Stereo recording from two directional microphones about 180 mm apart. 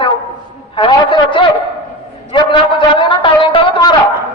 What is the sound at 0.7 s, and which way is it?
Speech, 25° left (ahead or behind).